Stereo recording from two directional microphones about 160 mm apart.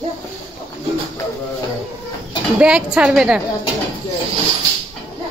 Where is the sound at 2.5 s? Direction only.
5° right (ahead or behind).